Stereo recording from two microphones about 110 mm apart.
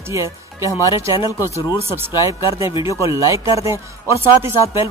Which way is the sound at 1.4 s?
30° left (ahead or behind).